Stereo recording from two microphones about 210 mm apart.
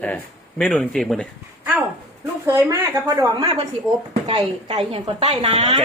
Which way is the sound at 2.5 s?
10° right (ahead or behind).